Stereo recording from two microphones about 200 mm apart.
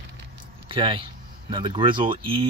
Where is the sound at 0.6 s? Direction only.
25° right (ahead or behind).